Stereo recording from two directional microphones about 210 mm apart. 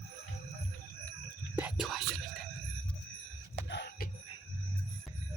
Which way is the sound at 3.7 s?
55° left (ahead or behind).